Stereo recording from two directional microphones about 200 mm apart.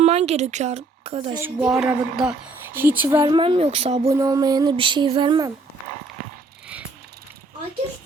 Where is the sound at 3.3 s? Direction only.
25° right (ahead or behind).